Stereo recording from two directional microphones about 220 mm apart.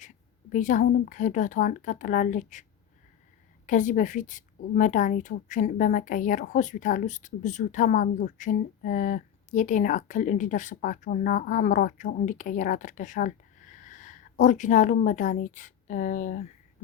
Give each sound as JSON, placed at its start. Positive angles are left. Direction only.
{"t": 0.5, "sound": "a woman's voice", "side_deg": 35}
{"t": 3.7, "sound": "a woman's voice", "side_deg": 35}